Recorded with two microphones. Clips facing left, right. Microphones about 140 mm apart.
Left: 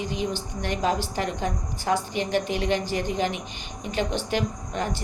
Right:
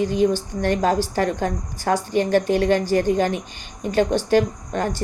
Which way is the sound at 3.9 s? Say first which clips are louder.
Right 9 dB; 45° right (ahead or behind).